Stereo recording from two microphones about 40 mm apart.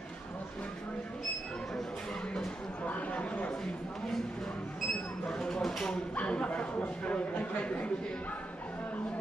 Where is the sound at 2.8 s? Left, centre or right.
Left.